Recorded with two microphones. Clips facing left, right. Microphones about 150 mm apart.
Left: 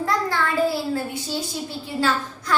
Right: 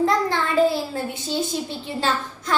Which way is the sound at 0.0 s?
20° right (ahead or behind).